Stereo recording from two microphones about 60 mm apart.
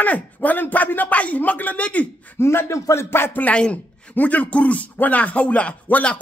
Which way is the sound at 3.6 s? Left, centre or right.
Centre.